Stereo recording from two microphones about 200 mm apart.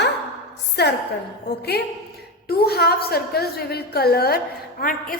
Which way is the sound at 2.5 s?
50° left (ahead or behind).